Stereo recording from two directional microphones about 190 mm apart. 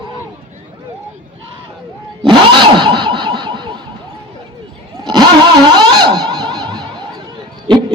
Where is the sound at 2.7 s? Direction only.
25° right (ahead or behind).